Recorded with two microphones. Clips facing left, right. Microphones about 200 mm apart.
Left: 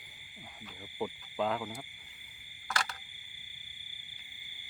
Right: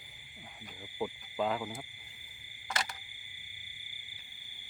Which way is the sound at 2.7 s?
20° right (ahead or behind).